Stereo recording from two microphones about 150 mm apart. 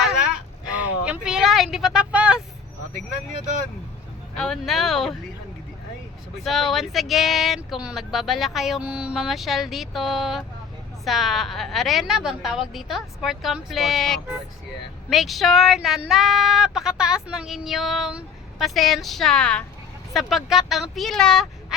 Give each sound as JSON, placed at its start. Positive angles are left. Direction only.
{"t": 0.6, "sound": "vehicle", "side_deg": -5}
{"t": 4.4, "sound": "speech", "side_deg": 0}
{"t": 6.4, "sound": "speech", "side_deg": 0}